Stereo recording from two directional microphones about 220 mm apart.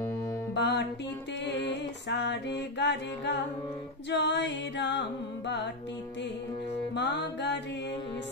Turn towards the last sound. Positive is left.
turn(degrees=50)  # may be behind; listen again after turning